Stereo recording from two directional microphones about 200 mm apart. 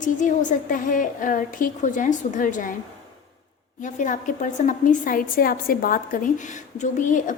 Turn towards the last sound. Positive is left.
turn(degrees=40)  # may be behind; listen again after turning